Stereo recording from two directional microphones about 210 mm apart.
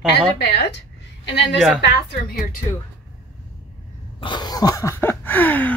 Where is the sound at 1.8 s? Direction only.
50° left (ahead or behind).